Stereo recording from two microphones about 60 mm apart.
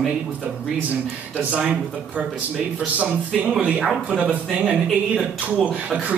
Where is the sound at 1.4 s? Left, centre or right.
Centre.